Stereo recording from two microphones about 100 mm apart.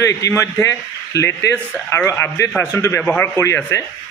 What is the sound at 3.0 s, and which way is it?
Speech, 15° left (ahead or behind).